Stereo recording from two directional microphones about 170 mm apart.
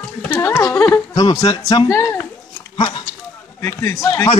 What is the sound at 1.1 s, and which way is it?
A man's voice, 20° left (ahead or behind).